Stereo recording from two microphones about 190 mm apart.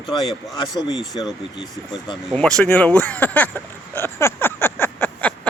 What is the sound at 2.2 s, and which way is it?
Speech, 5° left (ahead or behind).